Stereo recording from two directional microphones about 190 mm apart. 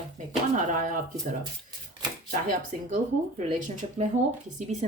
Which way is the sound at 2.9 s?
45° right (ahead or behind).